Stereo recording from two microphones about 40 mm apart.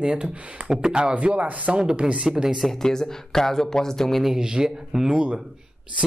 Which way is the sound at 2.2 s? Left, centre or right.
Centre.